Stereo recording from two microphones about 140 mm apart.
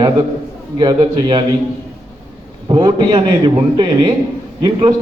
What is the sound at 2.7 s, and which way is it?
A man's voice, 30° right (ahead or behind).